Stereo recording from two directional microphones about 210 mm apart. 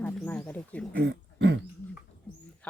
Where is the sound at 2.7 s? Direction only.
5° left (ahead or behind).